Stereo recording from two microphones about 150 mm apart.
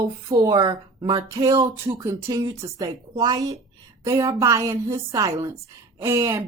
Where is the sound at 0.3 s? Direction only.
25° right (ahead or behind).